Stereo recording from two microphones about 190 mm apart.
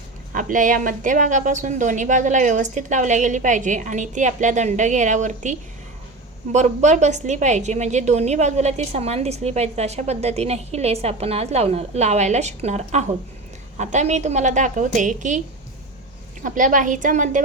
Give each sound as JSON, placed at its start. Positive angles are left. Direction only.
{"t": 0.3, "sound": "a woman's voice", "side_deg": -45}
{"t": 16.4, "sound": "a woman's voice", "side_deg": -45}